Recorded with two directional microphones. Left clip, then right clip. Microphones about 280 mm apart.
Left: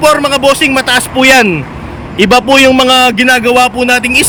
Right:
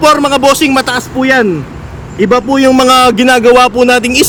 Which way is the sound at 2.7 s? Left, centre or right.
Centre.